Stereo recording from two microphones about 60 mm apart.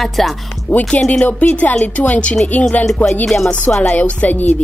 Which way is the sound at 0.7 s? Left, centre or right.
Left.